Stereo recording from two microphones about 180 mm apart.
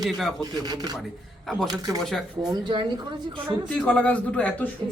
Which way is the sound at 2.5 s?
25° right (ahead or behind).